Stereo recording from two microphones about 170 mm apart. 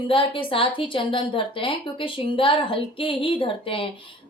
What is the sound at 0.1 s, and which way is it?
A woman's voice, 30° left (ahead or behind).